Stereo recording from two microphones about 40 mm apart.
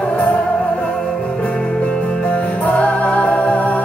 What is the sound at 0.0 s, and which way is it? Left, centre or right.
Music, left.